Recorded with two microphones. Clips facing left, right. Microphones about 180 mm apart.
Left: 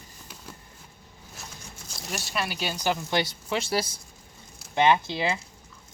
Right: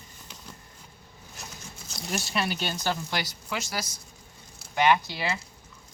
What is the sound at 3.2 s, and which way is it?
Speech, 25° left (ahead or behind).